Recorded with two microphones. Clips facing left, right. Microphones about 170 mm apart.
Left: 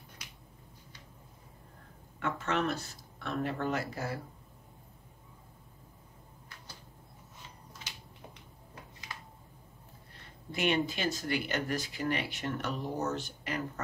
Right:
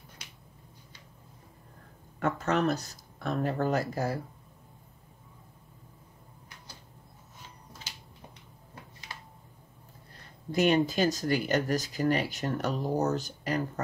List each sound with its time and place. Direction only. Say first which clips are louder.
2.1 s speech: right 5 dB; 40° right (ahead or behind)
10.5 s speech: right 6 dB; 40° right (ahead or behind)